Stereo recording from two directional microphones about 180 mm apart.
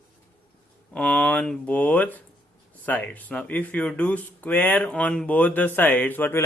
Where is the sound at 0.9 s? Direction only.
5° left (ahead or behind).